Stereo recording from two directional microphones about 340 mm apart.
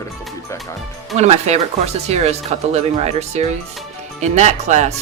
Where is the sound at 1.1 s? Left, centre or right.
Centre.